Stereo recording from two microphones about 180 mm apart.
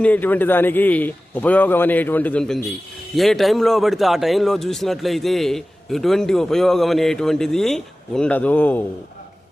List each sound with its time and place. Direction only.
0.0 s a man's voice: 10° left (ahead or behind)